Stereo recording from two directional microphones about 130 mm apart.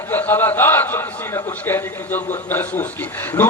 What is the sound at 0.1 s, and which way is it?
A man's voice, 15° left (ahead or behind).